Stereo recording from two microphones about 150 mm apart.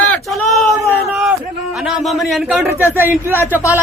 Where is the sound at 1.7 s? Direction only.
Centre (ahead or behind).